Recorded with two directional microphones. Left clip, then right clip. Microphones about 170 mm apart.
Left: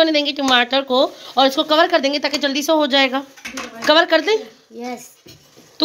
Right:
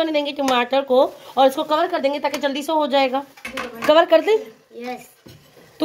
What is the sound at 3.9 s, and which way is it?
Speech, 10° right (ahead or behind).